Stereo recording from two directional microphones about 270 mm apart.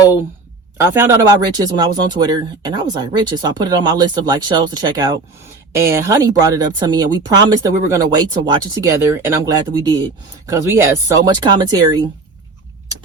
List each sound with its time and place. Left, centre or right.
0.8 s speech: centre